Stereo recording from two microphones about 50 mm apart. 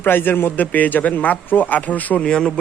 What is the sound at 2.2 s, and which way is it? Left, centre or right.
Speech, centre.